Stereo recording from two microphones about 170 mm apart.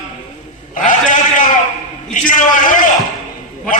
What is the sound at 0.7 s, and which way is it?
A man's voice, 45° left (ahead or behind).